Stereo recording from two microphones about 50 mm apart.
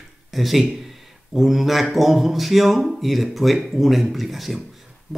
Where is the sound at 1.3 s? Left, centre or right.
Centre.